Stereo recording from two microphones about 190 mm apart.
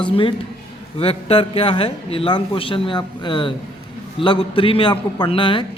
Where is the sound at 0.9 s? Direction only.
30° left (ahead or behind).